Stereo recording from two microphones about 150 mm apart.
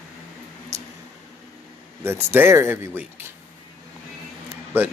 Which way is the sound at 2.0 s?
15° right (ahead or behind).